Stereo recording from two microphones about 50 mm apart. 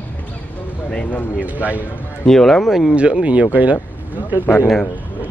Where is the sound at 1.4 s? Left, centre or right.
Right.